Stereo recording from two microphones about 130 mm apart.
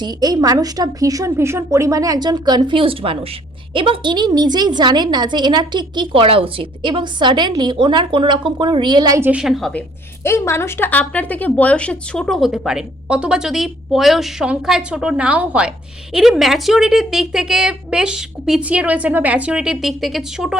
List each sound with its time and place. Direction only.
0.0 s a woman's voice: 30° right (ahead or behind)
9.2 s speech: 5° right (ahead or behind)
10.2 s speech: 20° left (ahead or behind); by 20.6 s 5° right (ahead or behind)